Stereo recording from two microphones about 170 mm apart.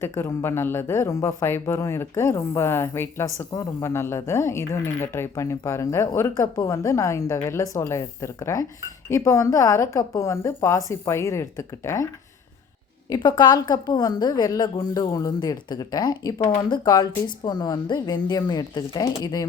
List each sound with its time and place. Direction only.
0.0 s speech: 15° left (ahead or behind)
13.1 s a woman's voice: 25° left (ahead or behind)